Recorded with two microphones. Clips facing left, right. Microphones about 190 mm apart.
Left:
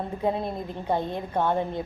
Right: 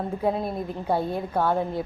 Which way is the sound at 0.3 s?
5° right (ahead or behind).